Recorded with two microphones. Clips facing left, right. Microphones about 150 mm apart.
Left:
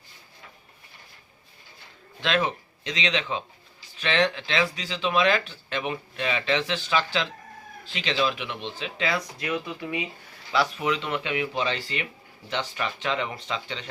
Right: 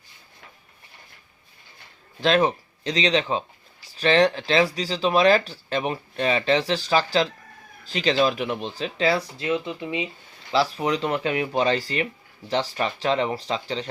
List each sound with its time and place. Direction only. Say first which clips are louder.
2.2 s speech: right 6 dB; 40° right (ahead or behind)